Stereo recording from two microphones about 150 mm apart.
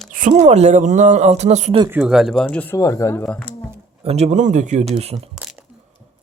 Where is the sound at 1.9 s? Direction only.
5° right (ahead or behind).